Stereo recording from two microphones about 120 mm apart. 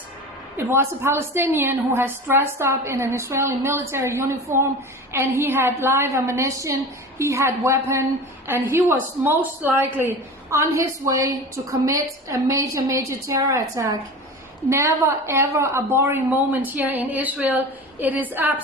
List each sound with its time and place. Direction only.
0.5 s a woman's voice: 20° right (ahead or behind)